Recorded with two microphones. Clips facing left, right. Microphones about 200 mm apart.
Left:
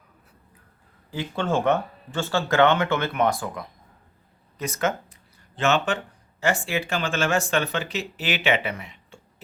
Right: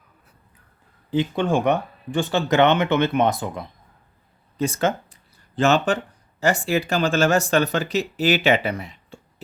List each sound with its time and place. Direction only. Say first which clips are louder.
1.1 s speech: right 5 dB; 20° right (ahead or behind); by 9.1 s 35° right (ahead or behind)